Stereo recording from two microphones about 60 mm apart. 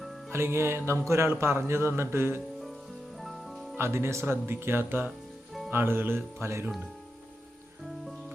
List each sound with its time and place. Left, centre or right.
0.3 s speech: right
3.2 s music: centre
3.8 s speech: right